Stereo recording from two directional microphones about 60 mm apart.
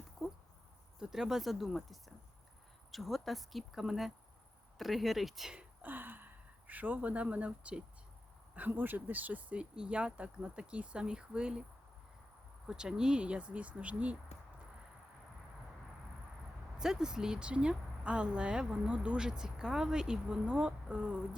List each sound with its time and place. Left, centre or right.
0.2 s a sound: centre
0.9 s speech: centre
5.8 s speech: right
8.5 s speech: right; by 11.6 s centre
12.6 s speech: centre
16.7 s speech: centre